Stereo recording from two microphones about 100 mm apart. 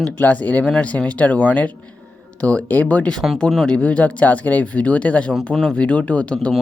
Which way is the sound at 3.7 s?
15° left (ahead or behind).